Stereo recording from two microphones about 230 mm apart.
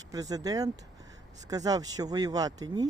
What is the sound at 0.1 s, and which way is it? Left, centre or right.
Speech, centre.